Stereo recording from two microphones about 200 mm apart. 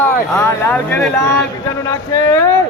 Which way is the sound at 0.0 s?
10° left (ahead or behind).